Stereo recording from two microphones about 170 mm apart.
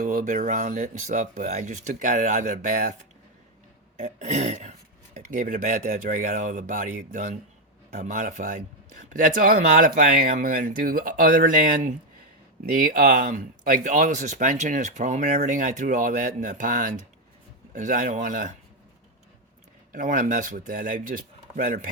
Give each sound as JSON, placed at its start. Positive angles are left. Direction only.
{"t": 0.0, "sound": "speech", "side_deg": -55}
{"t": 3.9, "sound": "speech", "side_deg": -45}
{"t": 19.9, "sound": "speech", "side_deg": -50}